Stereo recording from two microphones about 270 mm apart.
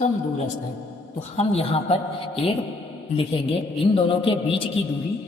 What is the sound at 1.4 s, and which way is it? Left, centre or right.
Speech, left.